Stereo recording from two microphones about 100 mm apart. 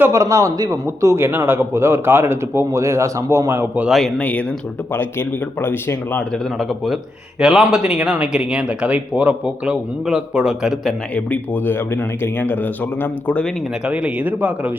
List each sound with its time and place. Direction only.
0.1 s a man's voice: 30° right (ahead or behind)
4.2 s speech: 15° left (ahead or behind)
6.6 s a man's voice: centre (ahead or behind)
11.1 s speech: 15° left (ahead or behind)
13.8 s speech: 10° right (ahead or behind)